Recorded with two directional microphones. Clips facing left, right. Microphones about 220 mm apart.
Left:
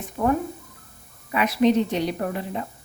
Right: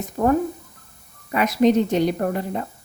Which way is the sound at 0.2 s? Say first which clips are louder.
Right 3 dB; 35° right (ahead or behind).